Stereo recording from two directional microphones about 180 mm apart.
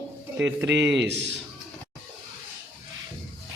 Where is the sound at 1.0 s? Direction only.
75° right (ahead or behind).